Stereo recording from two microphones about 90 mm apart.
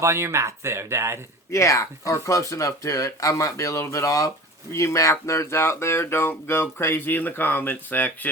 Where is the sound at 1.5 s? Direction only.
35° left (ahead or behind).